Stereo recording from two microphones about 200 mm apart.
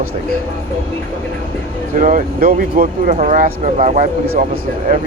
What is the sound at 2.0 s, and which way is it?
Speech, 40° right (ahead or behind).